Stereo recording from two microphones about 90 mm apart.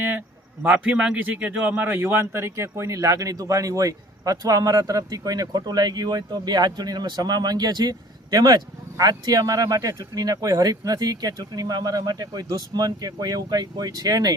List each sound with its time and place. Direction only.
0.6 s a man's voice: 15° right (ahead or behind); by 14.3 s 45° right (ahead or behind)